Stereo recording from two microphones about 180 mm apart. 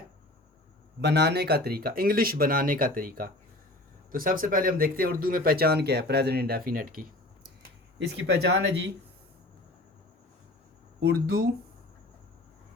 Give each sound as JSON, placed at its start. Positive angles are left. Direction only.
{"t": 1.0, "sound": "speech", "side_deg": -65}
{"t": 7.9, "sound": "speech", "side_deg": -75}
{"t": 11.0, "sound": "speech", "side_deg": -55}